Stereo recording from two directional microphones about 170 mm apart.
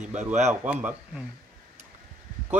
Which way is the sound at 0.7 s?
10° right (ahead or behind).